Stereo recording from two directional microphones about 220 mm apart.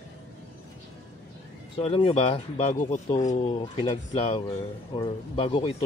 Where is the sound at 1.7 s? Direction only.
25° left (ahead or behind).